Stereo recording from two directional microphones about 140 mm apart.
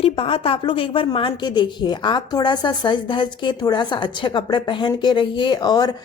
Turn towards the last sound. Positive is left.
turn(degrees=30)  # may be behind; listen again after turning